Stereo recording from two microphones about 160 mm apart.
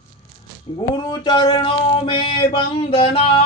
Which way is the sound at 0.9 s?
25° left (ahead or behind).